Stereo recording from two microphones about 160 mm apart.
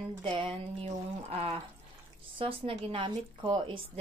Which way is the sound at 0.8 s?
40° right (ahead or behind).